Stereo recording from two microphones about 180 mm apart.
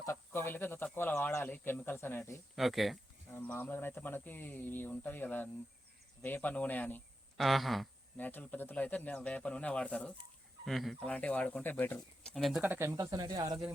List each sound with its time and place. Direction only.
0.0 s speech: 15° left (ahead or behind)
2.6 s speech: centre (ahead or behind)
3.3 s speech: 10° left (ahead or behind)
12.6 s speech: 10° right (ahead or behind)